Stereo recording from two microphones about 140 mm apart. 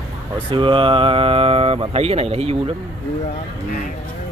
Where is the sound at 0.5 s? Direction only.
35° right (ahead or behind).